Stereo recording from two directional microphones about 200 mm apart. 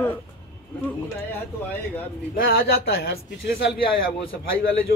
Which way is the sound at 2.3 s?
50° left (ahead or behind).